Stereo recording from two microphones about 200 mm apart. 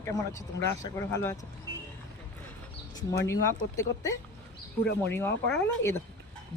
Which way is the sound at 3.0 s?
15° left (ahead or behind).